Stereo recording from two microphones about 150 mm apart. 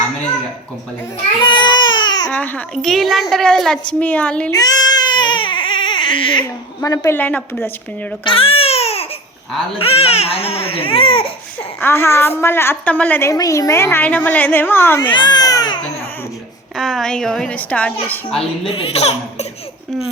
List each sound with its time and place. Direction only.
1.4 s baby cry: 30° left (ahead or behind)
2.3 s a woman's voice: 10° left (ahead or behind)
4.5 s baby cry: 25° left (ahead or behind)
6.8 s a woman's voice: 25° left (ahead or behind)
7.2 s a woman's voice: 10° left (ahead or behind)
8.2 s babbling: 35° left (ahead or behind)
9.7 s speech: 40° left (ahead or behind)
11.8 s a woman's voice: 15° left (ahead or behind)
15.1 s baby cry: 30° left (ahead or behind)
16.7 s a woman's voice: centre (ahead or behind)
18.8 s speech: 45° left (ahead or behind)